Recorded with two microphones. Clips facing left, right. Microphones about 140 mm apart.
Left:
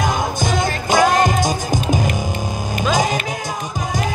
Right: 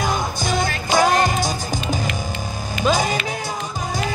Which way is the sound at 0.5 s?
50° left (ahead or behind).